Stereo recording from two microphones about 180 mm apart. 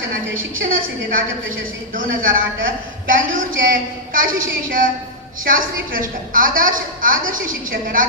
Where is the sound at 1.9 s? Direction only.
50° right (ahead or behind).